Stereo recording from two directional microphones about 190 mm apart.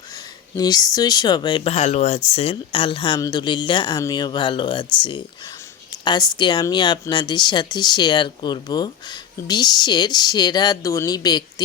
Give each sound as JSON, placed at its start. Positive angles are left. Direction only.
{"t": 0.5, "sound": "speech", "side_deg": 20}